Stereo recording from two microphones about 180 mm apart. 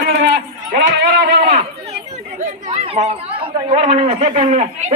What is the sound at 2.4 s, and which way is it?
Chatter, 35° right (ahead or behind).